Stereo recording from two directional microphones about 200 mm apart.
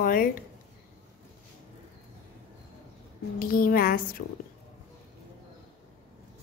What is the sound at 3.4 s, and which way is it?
Speech, 45° left (ahead or behind).